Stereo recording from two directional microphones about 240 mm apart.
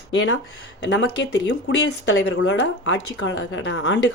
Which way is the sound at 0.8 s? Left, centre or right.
Left.